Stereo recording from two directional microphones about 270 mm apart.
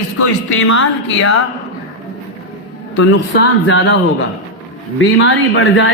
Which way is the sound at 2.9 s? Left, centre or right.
Left.